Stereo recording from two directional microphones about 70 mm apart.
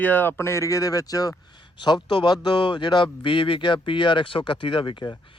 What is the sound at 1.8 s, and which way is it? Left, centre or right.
Speech, left.